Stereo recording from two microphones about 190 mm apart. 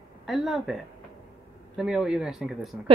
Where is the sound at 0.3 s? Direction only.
Centre (ahead or behind).